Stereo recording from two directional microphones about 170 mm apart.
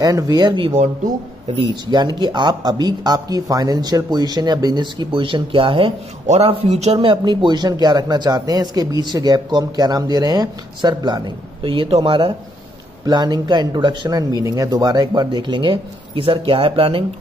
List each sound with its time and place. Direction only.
0.0 s speech: 25° right (ahead or behind)